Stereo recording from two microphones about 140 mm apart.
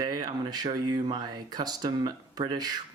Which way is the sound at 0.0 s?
30° right (ahead or behind).